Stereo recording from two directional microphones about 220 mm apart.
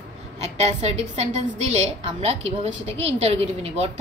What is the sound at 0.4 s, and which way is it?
A woman's voice, 30° right (ahead or behind).